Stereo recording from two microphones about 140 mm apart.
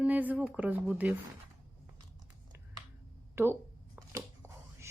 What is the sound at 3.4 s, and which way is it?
Speech, 20° right (ahead or behind).